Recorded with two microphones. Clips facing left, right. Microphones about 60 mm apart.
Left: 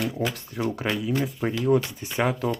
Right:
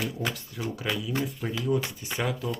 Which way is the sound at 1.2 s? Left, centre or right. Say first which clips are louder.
Left 5 dB; left.